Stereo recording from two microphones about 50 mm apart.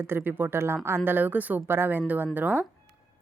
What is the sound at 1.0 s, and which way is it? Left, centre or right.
Speech, right.